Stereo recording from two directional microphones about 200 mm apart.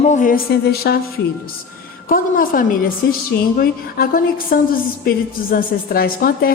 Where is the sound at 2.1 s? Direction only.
45° left (ahead or behind).